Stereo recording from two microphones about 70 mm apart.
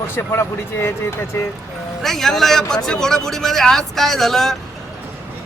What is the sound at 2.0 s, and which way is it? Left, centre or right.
A man's voice, centre.